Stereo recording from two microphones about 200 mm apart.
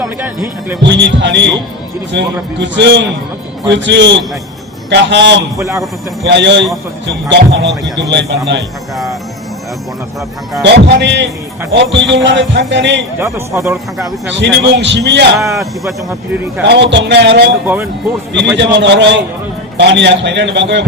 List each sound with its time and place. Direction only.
0.0 s speech: 10° right (ahead or behind)
0.8 s a man's voice: 60° right (ahead or behind)
10.6 s a man's voice: 60° right (ahead or behind)
13.1 s speech: 15° right (ahead or behind)
14.3 s a man's voice: 65° right (ahead or behind)
15.4 s speech: 15° right (ahead or behind)
15.9 s speech: 5° right (ahead or behind)
16.6 s a man's voice: 60° right (ahead or behind)
18.5 s a man's voice: 60° right (ahead or behind)